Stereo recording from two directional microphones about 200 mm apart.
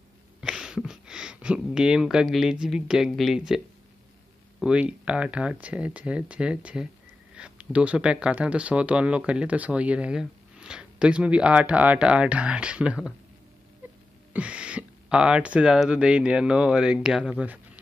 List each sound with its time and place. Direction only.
0.4 s speech: 5° right (ahead or behind)
14.3 s speech: 5° right (ahead or behind)